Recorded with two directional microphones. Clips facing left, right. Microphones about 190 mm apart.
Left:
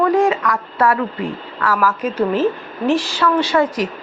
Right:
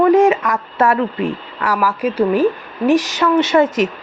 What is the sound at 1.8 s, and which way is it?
A woman's voice, 10° right (ahead or behind).